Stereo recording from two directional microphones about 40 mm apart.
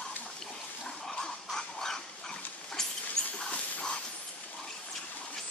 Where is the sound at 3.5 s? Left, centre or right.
Left.